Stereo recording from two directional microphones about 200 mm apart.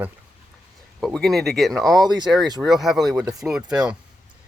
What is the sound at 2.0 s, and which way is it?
Speech, 20° right (ahead or behind).